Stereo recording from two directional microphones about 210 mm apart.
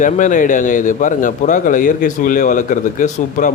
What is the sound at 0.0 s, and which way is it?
Speech, 40° left (ahead or behind).